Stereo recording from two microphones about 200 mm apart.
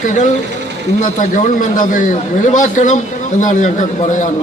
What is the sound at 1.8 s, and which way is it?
A man's voice, 40° left (ahead or behind).